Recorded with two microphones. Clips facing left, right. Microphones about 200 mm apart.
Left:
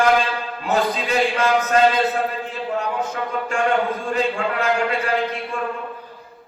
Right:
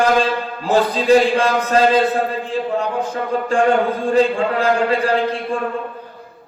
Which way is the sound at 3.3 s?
30° right (ahead or behind).